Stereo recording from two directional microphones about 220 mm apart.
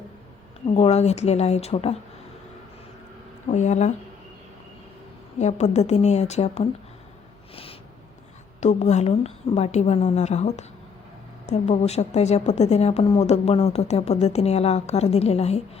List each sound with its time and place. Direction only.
0.7 s a woman's voice: 30° left (ahead or behind)
3.5 s a woman's voice: 35° left (ahead or behind)
5.4 s a woman's voice: 30° left (ahead or behind)
7.5 s a sound: 25° left (ahead or behind)
8.6 s a woman's voice: 30° left (ahead or behind)